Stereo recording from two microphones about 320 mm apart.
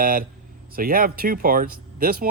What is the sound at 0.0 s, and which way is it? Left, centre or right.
Speech, right.